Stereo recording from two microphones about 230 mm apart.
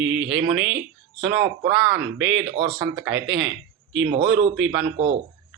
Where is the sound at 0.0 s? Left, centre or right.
Right.